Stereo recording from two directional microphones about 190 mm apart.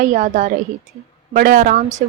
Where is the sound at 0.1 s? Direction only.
45° right (ahead or behind).